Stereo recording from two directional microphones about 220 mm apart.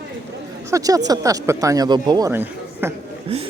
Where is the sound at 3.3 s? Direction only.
30° right (ahead or behind).